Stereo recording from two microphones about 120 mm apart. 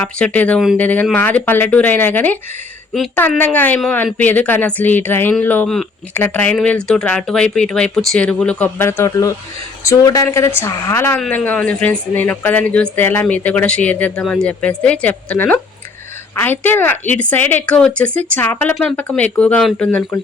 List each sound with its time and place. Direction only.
0.0 s a woman's voice: 10° left (ahead or behind)